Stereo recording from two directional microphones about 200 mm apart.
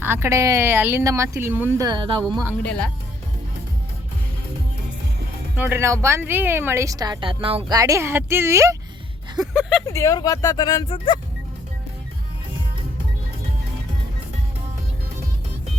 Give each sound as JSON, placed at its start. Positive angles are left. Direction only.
{"t": 0.0, "sound": "a woman's voice", "side_deg": -10}
{"t": 2.5, "sound": "speech", "side_deg": 5}
{"t": 5.5, "sound": "a woman's voice", "side_deg": -10}
{"t": 9.5, "sound": "speech", "side_deg": 0}
{"t": 9.8, "sound": "speech", "side_deg": 15}